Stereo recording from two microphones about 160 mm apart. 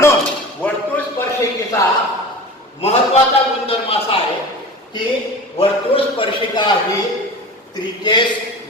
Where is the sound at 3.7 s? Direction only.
35° left (ahead or behind).